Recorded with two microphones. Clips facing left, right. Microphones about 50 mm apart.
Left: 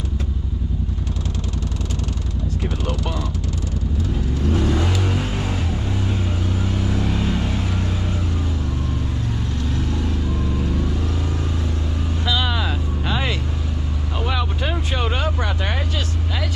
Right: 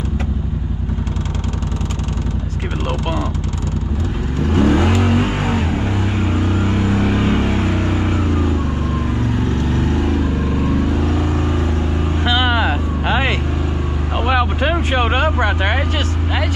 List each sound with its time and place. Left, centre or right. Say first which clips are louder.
2.9 s vehicle: right 8 dB; right
4.5 s vehicle: right 7 dB; right
12.3 s vehicle: right 6 dB; right